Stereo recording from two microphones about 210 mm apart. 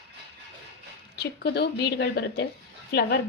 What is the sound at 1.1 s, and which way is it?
A woman's voice, 50° left (ahead or behind).